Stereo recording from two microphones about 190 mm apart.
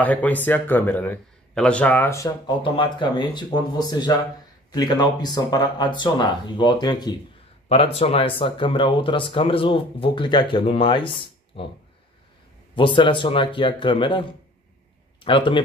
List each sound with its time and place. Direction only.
0.0 s speech: 10° left (ahead or behind)
7.6 s speech: 30° left (ahead or behind)
12.7 s speech: 25° left (ahead or behind)
15.2 s speech: 25° left (ahead or behind)